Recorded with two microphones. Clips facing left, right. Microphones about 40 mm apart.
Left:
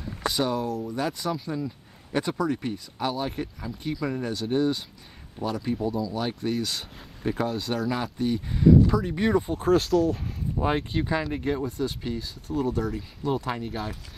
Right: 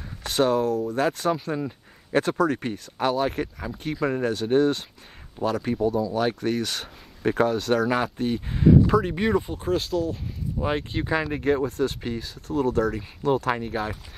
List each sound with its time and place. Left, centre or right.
0.3 s speech: right
1.3 s speech: right
2.1 s speech: right
8.4 s speech: right
8.8 s speech: right
9.1 s speech: centre
9.7 s speech: left
10.6 s speech: centre
11.0 s speech: centre
11.6 s speech: right
13.5 s speech: right